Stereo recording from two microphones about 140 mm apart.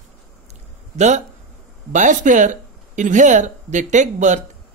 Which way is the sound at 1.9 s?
65° right (ahead or behind).